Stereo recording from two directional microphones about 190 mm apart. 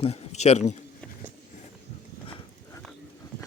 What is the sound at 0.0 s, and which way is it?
Speech, 35° left (ahead or behind).